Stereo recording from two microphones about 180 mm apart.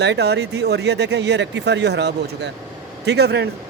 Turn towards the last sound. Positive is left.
turn(degrees=-65)  # may be behind; listen again after turning